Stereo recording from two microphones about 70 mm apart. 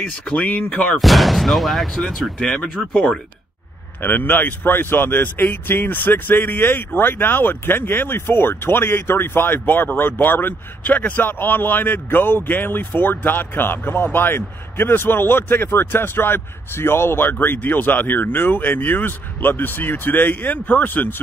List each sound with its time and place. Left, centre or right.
0.0 s speech: centre
0.9 s speech: centre
4.0 s speech: left